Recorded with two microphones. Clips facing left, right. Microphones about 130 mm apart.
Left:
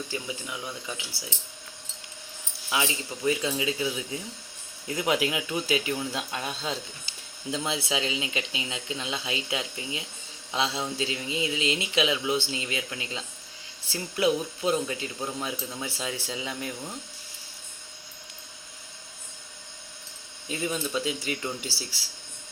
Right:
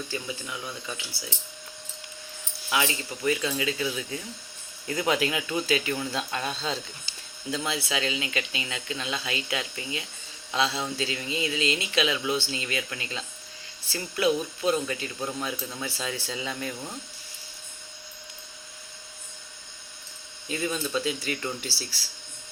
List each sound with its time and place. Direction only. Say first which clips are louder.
0.1 s speech: even; 15° left (ahead or behind)
2.6 s speech: right 1 dB; 10° left (ahead or behind)
20.5 s speech: right 1 dB; 10° left (ahead or behind)